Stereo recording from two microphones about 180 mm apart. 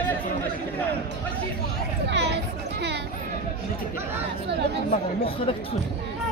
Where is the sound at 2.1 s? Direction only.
70° right (ahead or behind).